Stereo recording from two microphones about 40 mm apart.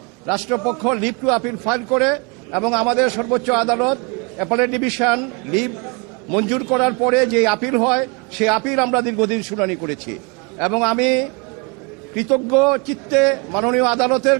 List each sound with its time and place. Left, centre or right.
0.3 s a man's voice: centre